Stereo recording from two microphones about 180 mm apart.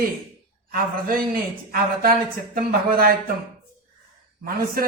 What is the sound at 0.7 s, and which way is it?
A man's voice, 55° right (ahead or behind).